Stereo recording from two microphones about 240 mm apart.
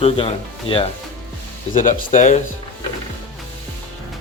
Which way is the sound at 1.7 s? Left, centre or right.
Left.